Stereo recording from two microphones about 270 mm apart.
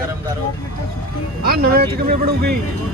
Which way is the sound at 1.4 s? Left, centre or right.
Right.